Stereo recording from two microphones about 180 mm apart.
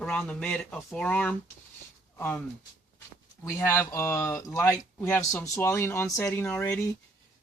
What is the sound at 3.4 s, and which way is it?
Speech, 15° left (ahead or behind).